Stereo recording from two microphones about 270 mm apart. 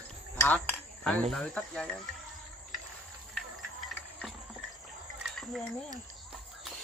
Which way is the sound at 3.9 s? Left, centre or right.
Centre.